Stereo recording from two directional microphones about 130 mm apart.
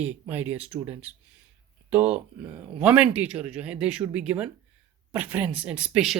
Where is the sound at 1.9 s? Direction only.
10° right (ahead or behind).